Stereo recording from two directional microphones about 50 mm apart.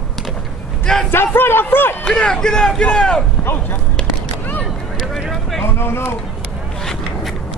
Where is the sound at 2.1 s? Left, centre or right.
Centre.